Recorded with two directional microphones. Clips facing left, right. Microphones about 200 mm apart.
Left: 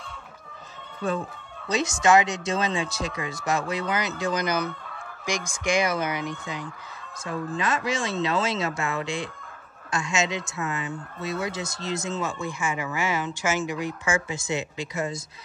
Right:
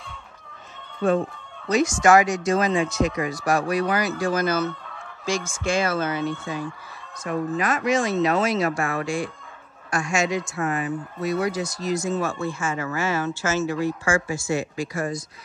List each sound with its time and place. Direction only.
1.7 s speech: 25° left (ahead or behind)
4.2 s fowl: 20° left (ahead or behind)
7.5 s speech: 25° left (ahead or behind)